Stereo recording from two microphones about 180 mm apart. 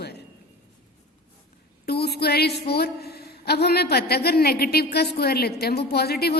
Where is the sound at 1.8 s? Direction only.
65° left (ahead or behind).